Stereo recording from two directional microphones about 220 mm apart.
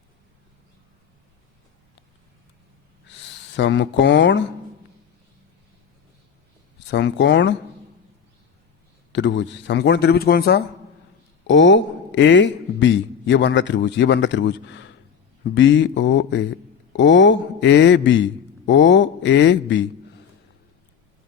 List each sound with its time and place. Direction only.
3.5 s a man's voice: 55° left (ahead or behind)
6.7 s speech: 50° left (ahead or behind)
9.1 s speech: 55° left (ahead or behind)
11.4 s a man's voice: 55° left (ahead or behind)